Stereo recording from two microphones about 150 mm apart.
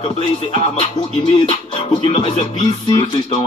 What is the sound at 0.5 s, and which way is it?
Music, 35° left (ahead or behind).